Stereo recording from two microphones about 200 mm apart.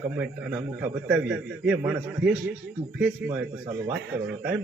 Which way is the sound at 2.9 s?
10° right (ahead or behind).